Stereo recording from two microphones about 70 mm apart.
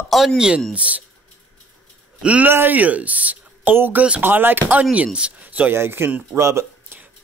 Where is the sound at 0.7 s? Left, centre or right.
Centre.